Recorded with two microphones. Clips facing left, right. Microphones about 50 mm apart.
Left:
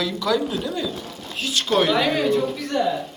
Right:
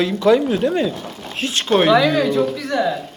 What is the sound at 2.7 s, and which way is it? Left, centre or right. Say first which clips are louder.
Speech: right 3 dB; right.